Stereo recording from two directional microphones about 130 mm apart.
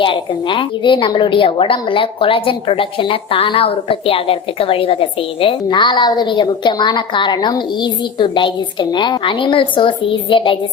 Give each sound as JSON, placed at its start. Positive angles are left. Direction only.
{"t": 0.0, "sound": "a woman's voice", "side_deg": 40}